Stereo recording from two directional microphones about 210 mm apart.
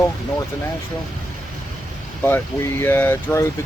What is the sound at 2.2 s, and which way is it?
Speech, 10° left (ahead or behind).